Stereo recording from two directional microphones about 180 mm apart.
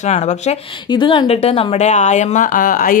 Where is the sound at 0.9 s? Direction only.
25° left (ahead or behind).